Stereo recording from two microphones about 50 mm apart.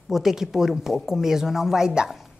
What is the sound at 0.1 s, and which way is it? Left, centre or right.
A woman's voice, centre.